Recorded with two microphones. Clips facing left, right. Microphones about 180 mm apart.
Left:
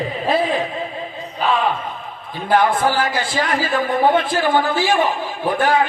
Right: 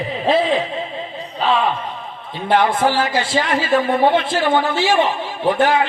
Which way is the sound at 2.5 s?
25° right (ahead or behind).